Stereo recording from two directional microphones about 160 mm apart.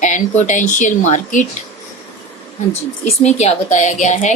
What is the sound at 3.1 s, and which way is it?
Speech, 40° left (ahead or behind).